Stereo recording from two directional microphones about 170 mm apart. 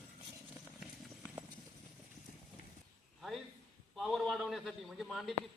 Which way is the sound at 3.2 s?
Centre (ahead or behind).